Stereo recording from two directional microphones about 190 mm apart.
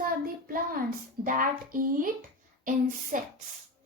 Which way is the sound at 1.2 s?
45° right (ahead or behind).